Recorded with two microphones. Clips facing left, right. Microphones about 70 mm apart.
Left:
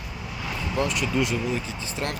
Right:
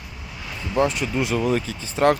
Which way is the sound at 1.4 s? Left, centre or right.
Right.